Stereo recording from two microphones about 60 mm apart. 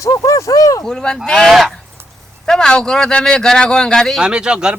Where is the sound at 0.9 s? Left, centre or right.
Centre.